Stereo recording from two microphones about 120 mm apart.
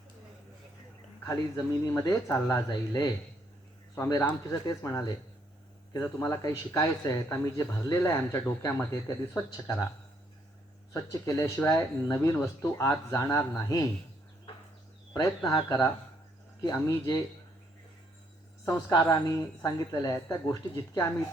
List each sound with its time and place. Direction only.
1.2 s speech: 30° left (ahead or behind)
2.6 s speech: 35° left (ahead or behind)
3.9 s speech: 20° left (ahead or behind)
10.9 s speech: 25° left (ahead or behind)
15.4 s speech: 25° left (ahead or behind)
18.9 s speech: 30° left (ahead or behind)